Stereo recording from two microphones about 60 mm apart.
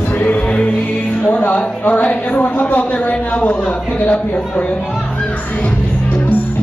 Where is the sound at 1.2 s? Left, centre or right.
Left.